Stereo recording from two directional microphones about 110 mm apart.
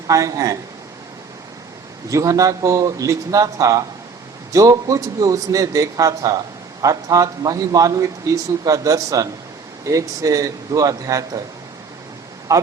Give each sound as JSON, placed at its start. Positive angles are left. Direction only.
{"t": 0.1, "sound": "a man's voice", "side_deg": -30}
{"t": 2.0, "sound": "a man's voice", "side_deg": -30}
{"t": 12.5, "sound": "a man's voice", "side_deg": -30}